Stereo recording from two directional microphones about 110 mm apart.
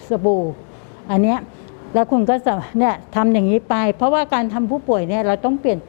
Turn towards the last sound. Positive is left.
turn(degrees=25)  # may be behind; listen again after turning